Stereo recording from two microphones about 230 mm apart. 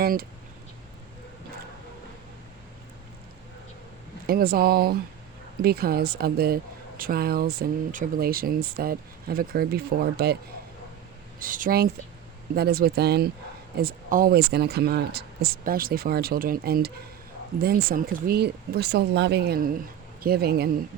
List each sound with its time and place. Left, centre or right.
0.0 s speech: right
4.3 s speech: right
11.3 s speech: right